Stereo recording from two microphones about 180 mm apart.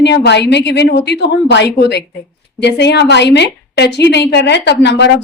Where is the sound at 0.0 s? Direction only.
70° left (ahead or behind).